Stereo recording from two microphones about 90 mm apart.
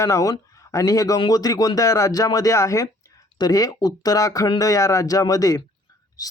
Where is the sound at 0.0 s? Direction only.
35° left (ahead or behind).